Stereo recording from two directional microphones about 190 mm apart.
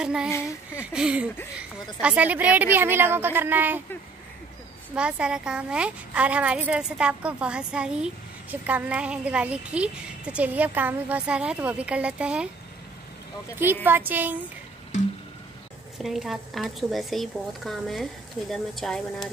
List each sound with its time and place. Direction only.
0.0 s a woman's voice: 5° right (ahead or behind)
4.9 s a woman's voice: 5° right (ahead or behind)
13.8 s a woman's voice: 10° right (ahead or behind)
14.9 s music: 40° left (ahead or behind)
16.0 s speech: centre (ahead or behind)